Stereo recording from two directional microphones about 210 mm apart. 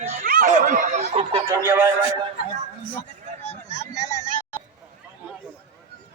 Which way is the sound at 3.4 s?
35° left (ahead or behind).